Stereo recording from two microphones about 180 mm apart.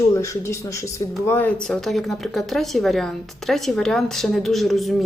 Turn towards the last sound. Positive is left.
turn(degrees=0)  # may be behind; listen again after turning